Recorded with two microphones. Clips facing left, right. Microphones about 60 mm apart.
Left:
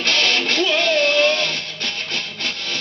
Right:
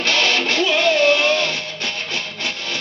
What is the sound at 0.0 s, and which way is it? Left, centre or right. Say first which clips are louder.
Music: right 1 dB; centre.